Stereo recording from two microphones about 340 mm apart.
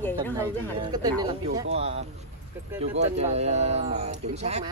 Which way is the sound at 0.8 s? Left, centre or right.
Centre.